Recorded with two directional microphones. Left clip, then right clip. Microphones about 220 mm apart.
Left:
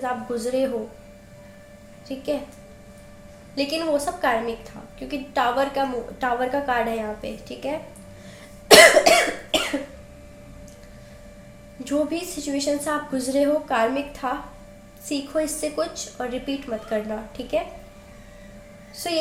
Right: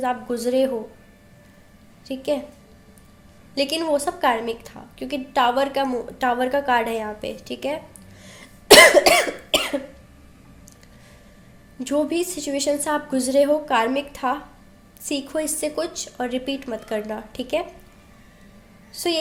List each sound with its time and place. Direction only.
0.0 s a woman's voice: 50° right (ahead or behind)
2.0 s a woman's voice: 50° right (ahead or behind)
3.5 s a woman's voice: 50° right (ahead or behind)
8.4 s cough: 50° right (ahead or behind)
11.8 s a woman's voice: 45° right (ahead or behind)
18.9 s a woman's voice: 50° right (ahead or behind)